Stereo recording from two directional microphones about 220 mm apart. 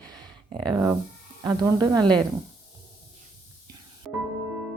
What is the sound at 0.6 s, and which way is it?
Speech, 15° right (ahead or behind).